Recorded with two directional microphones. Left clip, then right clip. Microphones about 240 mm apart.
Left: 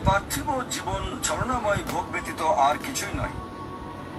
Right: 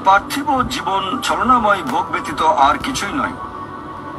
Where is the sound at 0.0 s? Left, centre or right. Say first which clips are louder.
Right 11 dB; right.